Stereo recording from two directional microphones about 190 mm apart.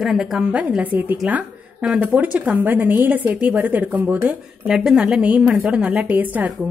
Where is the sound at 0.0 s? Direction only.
Centre (ahead or behind).